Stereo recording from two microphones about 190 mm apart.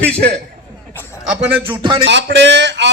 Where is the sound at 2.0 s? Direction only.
70° right (ahead or behind).